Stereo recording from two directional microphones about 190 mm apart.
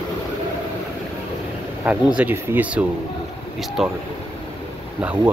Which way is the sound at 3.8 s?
Centre (ahead or behind).